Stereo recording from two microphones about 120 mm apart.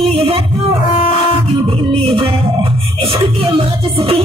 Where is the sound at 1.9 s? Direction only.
55° right (ahead or behind).